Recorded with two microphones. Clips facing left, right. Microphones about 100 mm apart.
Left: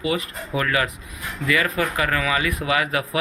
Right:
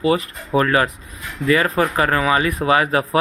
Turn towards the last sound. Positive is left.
turn(degrees=-35)  # may be behind; listen again after turning